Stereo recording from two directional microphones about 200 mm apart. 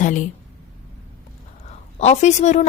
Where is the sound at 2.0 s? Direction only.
35° left (ahead or behind).